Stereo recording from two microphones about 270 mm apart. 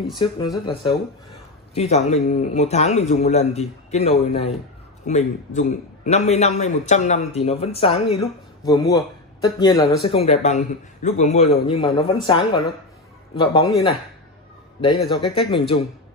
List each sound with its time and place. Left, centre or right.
0.1 s speech: centre
2.0 s a man's voice: left